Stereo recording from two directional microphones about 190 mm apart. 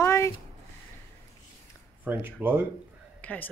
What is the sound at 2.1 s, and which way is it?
Speech, 10° right (ahead or behind).